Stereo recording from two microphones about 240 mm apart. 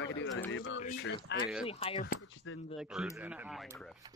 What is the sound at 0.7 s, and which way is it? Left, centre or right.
Speech, left.